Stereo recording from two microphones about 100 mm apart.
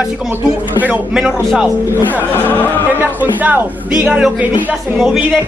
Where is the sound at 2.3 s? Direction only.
20° left (ahead or behind).